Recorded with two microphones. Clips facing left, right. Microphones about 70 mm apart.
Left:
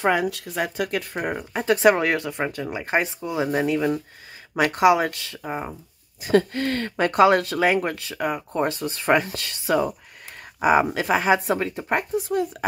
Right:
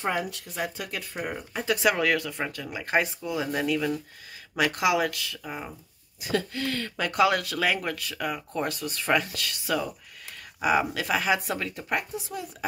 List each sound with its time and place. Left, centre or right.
0.0 s speech: left